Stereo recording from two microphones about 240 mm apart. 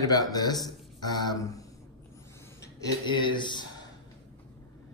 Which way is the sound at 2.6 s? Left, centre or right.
Centre.